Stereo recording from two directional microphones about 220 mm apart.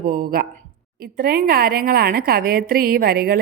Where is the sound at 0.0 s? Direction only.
40° right (ahead or behind).